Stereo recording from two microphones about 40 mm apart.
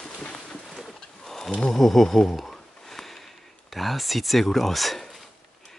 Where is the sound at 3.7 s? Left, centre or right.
Centre.